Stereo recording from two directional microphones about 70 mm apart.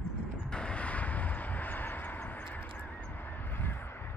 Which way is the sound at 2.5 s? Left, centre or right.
Left.